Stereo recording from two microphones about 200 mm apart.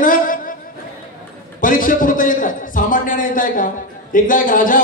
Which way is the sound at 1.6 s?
45° left (ahead or behind).